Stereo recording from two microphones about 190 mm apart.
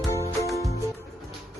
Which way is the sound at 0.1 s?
15° left (ahead or behind).